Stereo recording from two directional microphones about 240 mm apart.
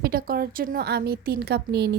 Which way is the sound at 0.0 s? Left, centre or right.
Right.